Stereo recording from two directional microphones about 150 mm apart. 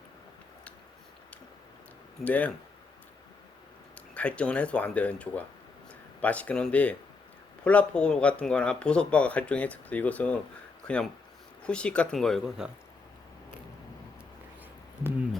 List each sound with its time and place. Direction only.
2.2 s speech: 10° left (ahead or behind)
4.1 s a man's voice: 10° left (ahead or behind)